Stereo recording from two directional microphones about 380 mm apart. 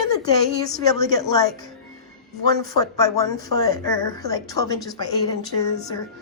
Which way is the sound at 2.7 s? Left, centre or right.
Centre.